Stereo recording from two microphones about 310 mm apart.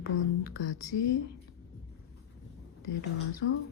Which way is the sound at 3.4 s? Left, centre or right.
Left.